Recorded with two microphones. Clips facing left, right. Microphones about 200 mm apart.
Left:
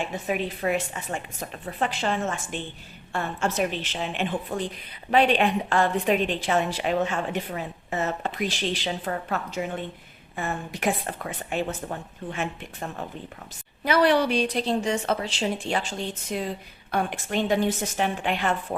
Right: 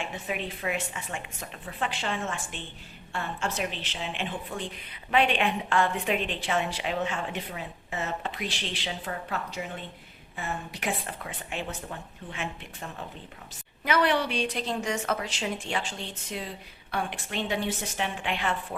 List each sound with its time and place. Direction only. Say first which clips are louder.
0.3 s a woman's voice: left 7 dB; 40° left (ahead or behind)